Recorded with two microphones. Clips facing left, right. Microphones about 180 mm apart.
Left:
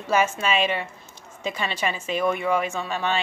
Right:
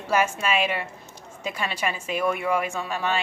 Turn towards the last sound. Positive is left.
turn(degrees=-5)  # may be behind; listen again after turning